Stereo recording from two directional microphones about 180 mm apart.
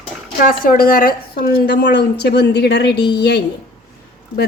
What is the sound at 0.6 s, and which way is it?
A woman's voice, 50° left (ahead or behind).